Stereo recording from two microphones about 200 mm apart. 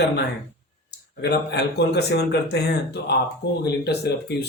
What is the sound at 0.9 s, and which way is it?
Speech, 55° left (ahead or behind).